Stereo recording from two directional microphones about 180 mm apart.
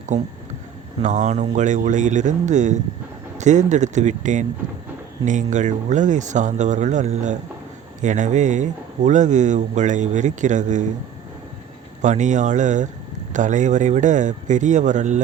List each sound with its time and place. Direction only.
1.0 s a man's voice: 40° right (ahead or behind)
12.0 s a man's voice: 40° right (ahead or behind)